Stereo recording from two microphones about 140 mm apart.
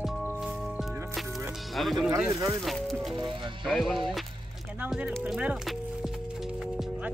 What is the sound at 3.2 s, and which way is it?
Speech, 35° right (ahead or behind).